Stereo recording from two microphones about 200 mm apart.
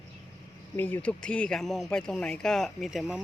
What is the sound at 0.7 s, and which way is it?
Speech, 10° left (ahead or behind).